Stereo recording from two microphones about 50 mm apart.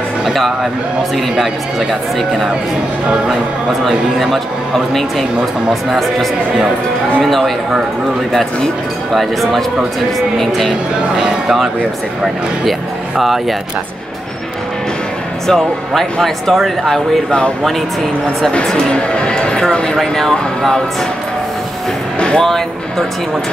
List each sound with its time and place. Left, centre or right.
0.2 s speech: centre
3.8 s speech: centre
7.2 s speech: centre
9.1 s a man's voice: centre
15.4 s speech: centre
18.5 s speech: centre
22.2 s music: centre